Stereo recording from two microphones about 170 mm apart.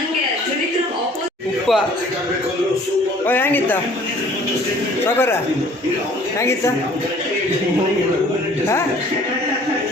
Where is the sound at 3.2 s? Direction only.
10° left (ahead or behind).